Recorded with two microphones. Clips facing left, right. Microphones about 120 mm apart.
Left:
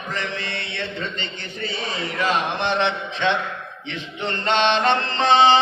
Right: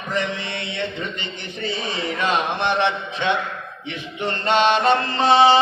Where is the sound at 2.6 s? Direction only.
15° right (ahead or behind).